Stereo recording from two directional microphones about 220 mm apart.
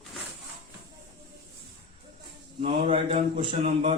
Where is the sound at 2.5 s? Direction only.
25° right (ahead or behind).